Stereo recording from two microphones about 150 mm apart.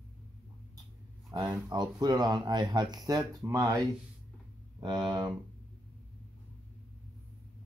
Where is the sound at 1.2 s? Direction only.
25° right (ahead or behind).